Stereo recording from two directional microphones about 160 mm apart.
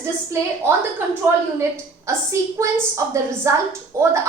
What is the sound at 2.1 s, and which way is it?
A woman's voice, 20° right (ahead or behind).